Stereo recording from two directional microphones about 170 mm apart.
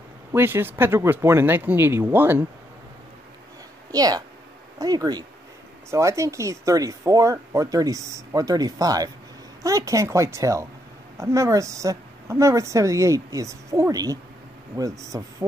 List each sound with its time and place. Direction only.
0.3 s speech: 15° right (ahead or behind)
3.9 s speech: 20° right (ahead or behind)